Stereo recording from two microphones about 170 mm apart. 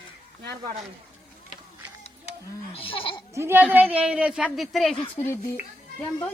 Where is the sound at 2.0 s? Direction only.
35° left (ahead or behind).